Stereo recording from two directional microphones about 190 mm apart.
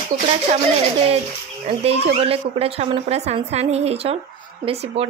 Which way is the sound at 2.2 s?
30° right (ahead or behind).